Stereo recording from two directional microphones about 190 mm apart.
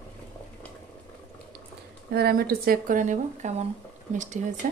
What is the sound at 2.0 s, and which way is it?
Speech, 55° right (ahead or behind).